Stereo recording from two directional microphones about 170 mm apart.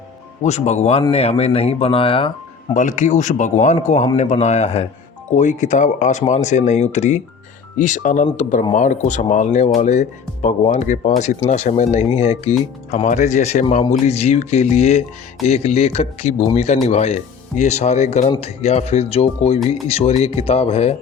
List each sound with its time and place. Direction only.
0.4 s speech: 40° left (ahead or behind)
2.7 s a man's voice: 45° left (ahead or behind)